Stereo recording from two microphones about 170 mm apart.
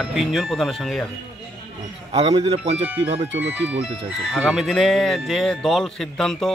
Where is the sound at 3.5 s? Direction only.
5° right (ahead or behind).